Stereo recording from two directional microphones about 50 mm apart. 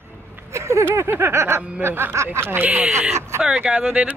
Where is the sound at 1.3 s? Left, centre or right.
Right.